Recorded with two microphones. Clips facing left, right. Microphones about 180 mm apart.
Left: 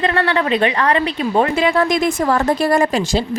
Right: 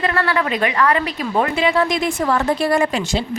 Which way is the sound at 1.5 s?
45° left (ahead or behind).